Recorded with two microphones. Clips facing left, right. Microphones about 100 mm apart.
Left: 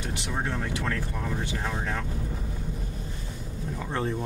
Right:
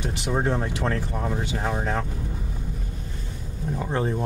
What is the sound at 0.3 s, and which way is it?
Speech, 35° right (ahead or behind).